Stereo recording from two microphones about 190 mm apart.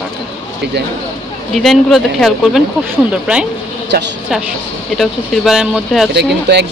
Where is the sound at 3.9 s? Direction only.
55° right (ahead or behind).